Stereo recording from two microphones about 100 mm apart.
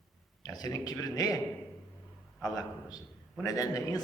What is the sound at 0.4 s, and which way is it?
Mantra, 40° left (ahead or behind).